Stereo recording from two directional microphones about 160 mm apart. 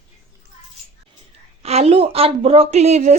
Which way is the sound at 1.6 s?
40° right (ahead or behind).